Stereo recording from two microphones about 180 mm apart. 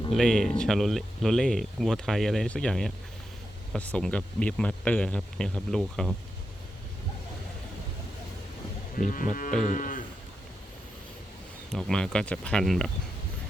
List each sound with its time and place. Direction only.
0.1 s speech: 5° left (ahead or behind)
9.0 s sheep: 50° left (ahead or behind)
11.7 s speech: 5° left (ahead or behind)